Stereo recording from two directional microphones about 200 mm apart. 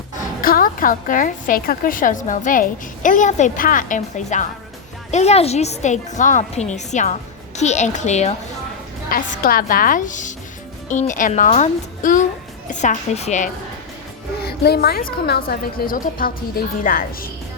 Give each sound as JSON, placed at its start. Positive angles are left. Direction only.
{"t": 0.4, "sound": "a woman's voice", "side_deg": 45}
{"t": 9.0, "sound": "a woman's voice", "side_deg": 45}
{"t": 14.4, "sound": "a woman's voice", "side_deg": 50}